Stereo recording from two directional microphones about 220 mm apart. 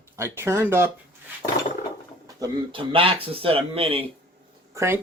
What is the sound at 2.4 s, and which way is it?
Speech, 25° right (ahead or behind).